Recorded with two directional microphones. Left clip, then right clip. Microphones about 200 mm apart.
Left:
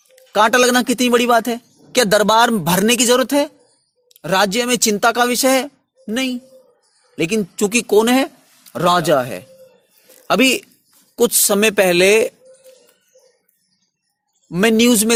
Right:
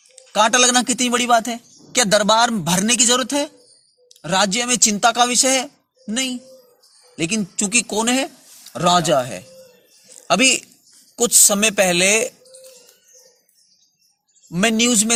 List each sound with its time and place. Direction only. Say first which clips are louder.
0.2 s a man's voice: left 2 dB; 50° left (ahead or behind)
14.5 s speech: left 4 dB; 50° left (ahead or behind)